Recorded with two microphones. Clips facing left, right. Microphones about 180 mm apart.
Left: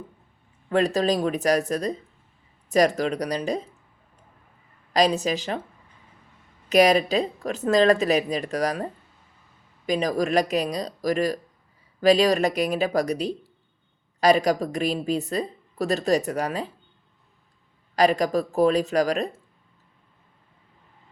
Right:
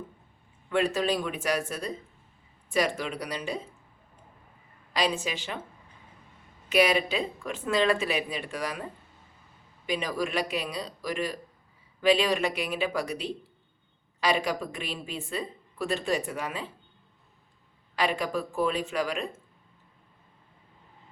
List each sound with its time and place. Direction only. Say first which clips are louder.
0.7 s a woman's voice: left 5 dB; 40° left (ahead or behind)
4.9 s a woman's voice: left 7 dB; 40° left (ahead or behind)
6.7 s a woman's voice: left 6 dB; 40° left (ahead or behind)
17.9 s a woman's voice: left 8 dB; 40° left (ahead or behind)